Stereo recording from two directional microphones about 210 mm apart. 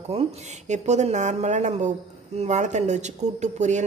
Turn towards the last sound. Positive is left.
turn(degrees=-35)  # may be behind; listen again after turning